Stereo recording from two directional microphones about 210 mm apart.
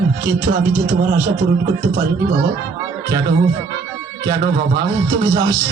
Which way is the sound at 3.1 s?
15° right (ahead or behind).